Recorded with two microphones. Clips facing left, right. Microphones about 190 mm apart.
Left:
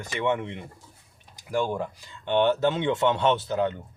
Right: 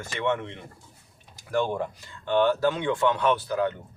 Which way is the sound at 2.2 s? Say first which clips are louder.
Even; 20° left (ahead or behind).